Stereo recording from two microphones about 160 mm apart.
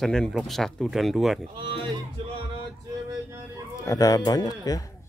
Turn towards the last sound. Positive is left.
turn(degrees=25)  # may be behind; listen again after turning